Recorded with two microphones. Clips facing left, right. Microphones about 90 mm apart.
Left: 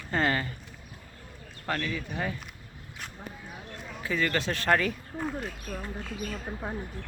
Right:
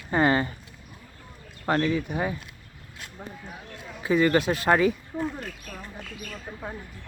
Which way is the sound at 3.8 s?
20° right (ahead or behind).